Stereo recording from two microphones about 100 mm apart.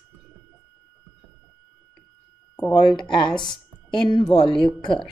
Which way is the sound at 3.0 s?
50° left (ahead or behind).